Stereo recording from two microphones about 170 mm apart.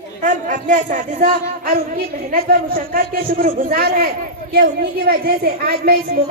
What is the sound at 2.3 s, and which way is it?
A man's voice, 60° right (ahead or behind).